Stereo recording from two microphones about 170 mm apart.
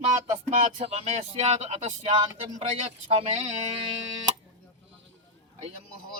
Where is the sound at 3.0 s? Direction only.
40° right (ahead or behind).